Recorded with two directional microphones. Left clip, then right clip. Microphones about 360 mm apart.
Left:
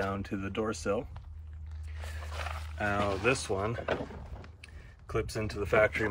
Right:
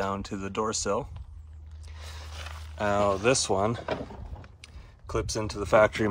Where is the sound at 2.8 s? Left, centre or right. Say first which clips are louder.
Right 6 dB; centre.